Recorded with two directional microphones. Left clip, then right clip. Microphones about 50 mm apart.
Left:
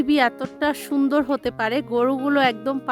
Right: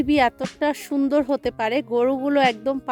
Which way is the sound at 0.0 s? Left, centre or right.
Left.